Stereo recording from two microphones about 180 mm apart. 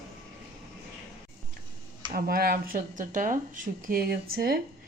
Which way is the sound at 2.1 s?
55° right (ahead or behind).